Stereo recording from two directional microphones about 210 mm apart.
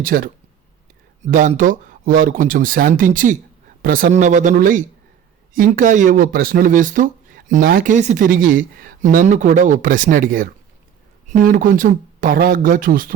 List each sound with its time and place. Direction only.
0.0 s speech: 45° right (ahead or behind)